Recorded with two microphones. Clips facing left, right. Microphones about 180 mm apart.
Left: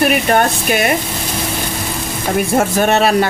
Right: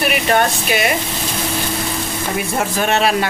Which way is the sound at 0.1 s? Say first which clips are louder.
Left 2 dB; 45° left (ahead or behind).